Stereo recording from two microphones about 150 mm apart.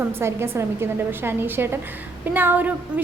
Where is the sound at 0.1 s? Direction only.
15° right (ahead or behind).